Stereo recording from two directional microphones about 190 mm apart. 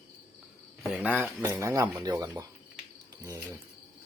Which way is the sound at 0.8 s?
5° right (ahead or behind).